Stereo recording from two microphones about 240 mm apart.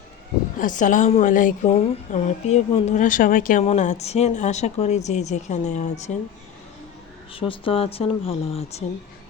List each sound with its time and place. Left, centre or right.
0.6 s a woman's voice: left
7.3 s a woman's voice: left